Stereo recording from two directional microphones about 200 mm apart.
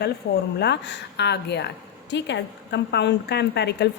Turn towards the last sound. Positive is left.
turn(degrees=55)  # may be behind; listen again after turning